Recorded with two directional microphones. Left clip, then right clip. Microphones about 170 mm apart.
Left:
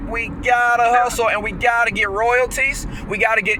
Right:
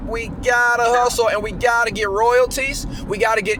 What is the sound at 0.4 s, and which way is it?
Speech, 85° right.